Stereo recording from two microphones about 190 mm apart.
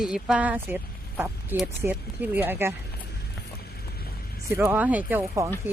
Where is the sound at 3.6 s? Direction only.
55° left (ahead or behind).